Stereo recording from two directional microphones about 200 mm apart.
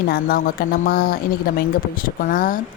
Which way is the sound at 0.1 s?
45° left (ahead or behind).